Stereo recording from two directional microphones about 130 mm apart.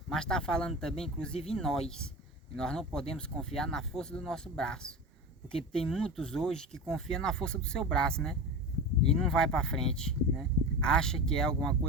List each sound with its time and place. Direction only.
0.1 s speech: 5° left (ahead or behind)